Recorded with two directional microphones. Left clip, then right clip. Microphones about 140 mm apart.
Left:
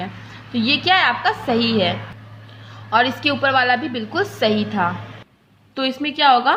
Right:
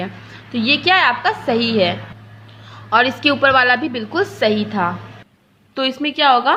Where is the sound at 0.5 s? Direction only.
30° right (ahead or behind).